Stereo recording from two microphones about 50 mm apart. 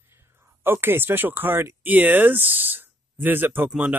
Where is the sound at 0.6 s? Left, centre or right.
Right.